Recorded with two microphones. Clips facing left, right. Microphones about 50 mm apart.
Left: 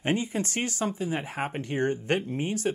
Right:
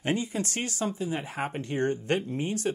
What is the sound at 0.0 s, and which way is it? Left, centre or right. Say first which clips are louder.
Speech: left 1 dB; left.